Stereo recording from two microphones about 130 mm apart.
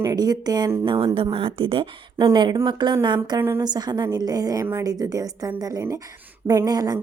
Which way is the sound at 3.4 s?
20° right (ahead or behind).